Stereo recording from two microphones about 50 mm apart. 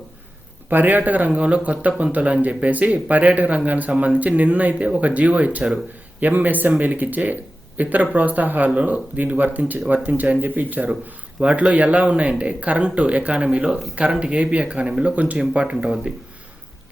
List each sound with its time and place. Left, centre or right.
0.7 s speech: right
11.3 s speech: right